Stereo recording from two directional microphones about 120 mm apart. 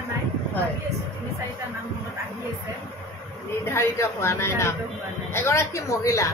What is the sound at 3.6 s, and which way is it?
A woman's voice, 20° left (ahead or behind).